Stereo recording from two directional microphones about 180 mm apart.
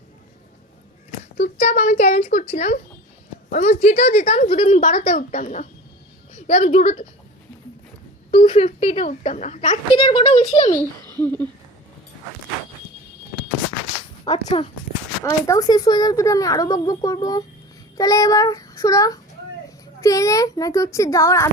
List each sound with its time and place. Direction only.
1.4 s speech: 40° left (ahead or behind)
4.8 s a woman's voice: 50° left (ahead or behind)
8.3 s speech: 35° left (ahead or behind)
9.9 s a child's voice: 30° left (ahead or behind)
10.8 s a child's voice: 20° right (ahead or behind)
11.2 s a child's voice: 10° left (ahead or behind)
14.3 s speech: 35° left (ahead or behind)
15.2 s a child's voice: 20° left (ahead or behind)
17.9 s child singing: 20° left (ahead or behind)
20.0 s a child's voice: 20° left (ahead or behind)